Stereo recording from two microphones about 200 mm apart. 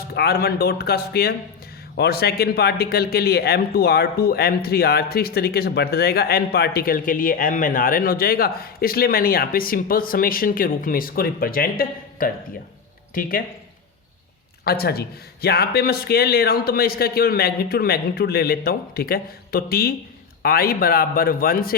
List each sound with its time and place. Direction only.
0.1 s speech: 50° left (ahead or behind)
14.6 s speech: 50° left (ahead or behind)